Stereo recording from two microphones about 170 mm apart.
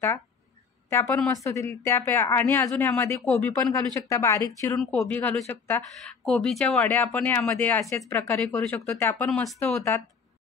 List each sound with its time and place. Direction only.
0.8 s a woman's voice: 15° left (ahead or behind)